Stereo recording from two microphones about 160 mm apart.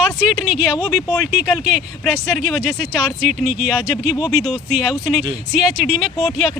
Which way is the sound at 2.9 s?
45° right (ahead or behind).